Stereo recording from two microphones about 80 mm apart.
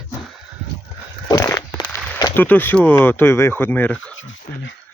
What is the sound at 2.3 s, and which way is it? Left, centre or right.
Speech, left.